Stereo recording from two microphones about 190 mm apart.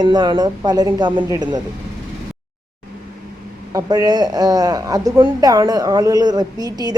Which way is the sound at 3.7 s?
20° right (ahead or behind).